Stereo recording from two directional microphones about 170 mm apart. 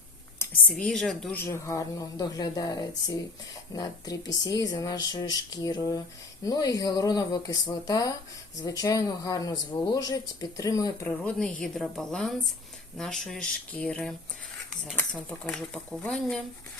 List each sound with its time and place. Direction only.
0.7 s a woman's voice: 5° left (ahead or behind); by 11.1 s 20° left (ahead or behind)
11.1 s speech: 5° left (ahead or behind)